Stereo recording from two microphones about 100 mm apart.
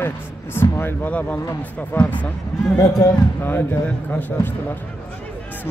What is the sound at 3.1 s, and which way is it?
Speech, 20° left (ahead or behind).